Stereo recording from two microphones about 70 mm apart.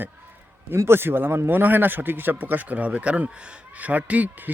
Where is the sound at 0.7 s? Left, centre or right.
Right.